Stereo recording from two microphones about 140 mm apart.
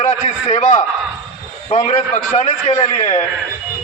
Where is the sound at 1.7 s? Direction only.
45° left (ahead or behind).